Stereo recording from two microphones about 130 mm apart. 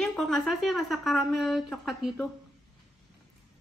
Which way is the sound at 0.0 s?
5° left (ahead or behind).